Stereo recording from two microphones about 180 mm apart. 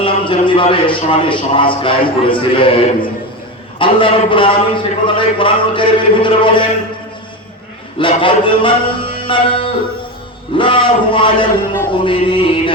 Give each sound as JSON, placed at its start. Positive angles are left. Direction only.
{"t": 0.0, "sound": "a man's voice", "side_deg": 30}
{"t": 7.9, "sound": "a man's voice", "side_deg": 30}